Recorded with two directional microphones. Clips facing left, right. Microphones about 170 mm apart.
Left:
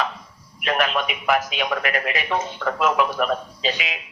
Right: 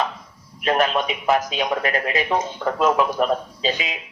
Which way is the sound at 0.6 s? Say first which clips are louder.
Right 3 dB; 25° right (ahead or behind).